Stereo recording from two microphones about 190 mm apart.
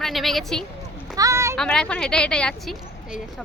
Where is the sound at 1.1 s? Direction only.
15° right (ahead or behind).